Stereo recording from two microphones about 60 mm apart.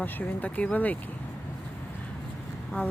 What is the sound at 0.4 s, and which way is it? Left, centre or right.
Speech, left.